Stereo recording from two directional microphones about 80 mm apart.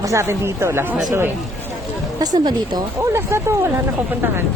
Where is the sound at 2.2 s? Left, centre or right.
Right.